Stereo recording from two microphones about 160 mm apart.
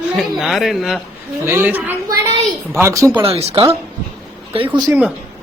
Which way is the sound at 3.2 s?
40° right (ahead or behind).